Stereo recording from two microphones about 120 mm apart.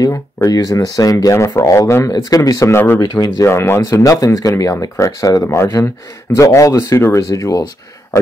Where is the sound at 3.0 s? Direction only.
35° left (ahead or behind).